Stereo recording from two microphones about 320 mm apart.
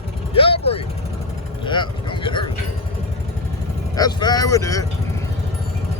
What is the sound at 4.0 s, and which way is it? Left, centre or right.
Speech, centre.